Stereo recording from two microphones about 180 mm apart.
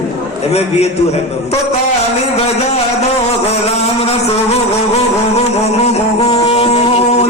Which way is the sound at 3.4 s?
35° left (ahead or behind).